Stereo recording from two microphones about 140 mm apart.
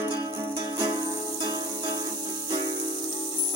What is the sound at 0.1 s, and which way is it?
Music, 30° right (ahead or behind).